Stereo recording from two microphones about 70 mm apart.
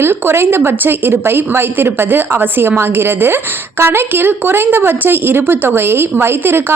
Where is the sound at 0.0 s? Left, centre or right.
Right.